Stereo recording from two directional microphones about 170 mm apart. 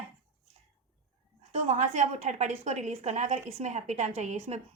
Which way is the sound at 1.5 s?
40° right (ahead or behind).